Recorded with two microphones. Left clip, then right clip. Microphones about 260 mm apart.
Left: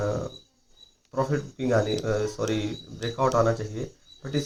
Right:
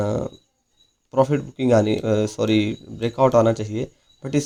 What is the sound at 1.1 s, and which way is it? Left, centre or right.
Speech, right.